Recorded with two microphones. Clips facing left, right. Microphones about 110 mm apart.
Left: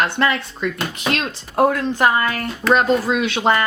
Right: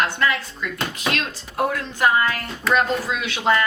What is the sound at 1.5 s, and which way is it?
A woman's voice, 35° left (ahead or behind).